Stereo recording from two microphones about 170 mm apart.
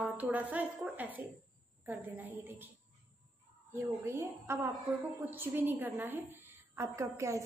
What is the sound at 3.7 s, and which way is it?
A woman's voice, 15° right (ahead or behind).